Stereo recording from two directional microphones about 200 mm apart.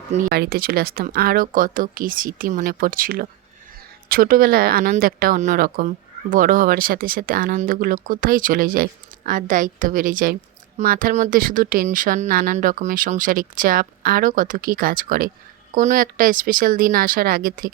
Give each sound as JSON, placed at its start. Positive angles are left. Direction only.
{"t": 0.3, "sound": "speech", "side_deg": -50}